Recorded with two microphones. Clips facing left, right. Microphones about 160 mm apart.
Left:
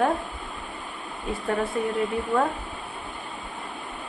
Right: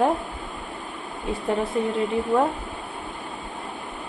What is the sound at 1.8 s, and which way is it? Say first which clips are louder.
Speech: right 2 dB; 25° right (ahead or behind).